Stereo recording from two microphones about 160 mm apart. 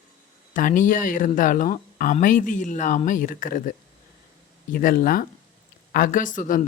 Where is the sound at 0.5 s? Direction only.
55° left (ahead or behind).